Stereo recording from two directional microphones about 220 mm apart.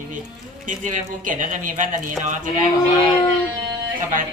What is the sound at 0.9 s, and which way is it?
Speech, 35° right (ahead or behind).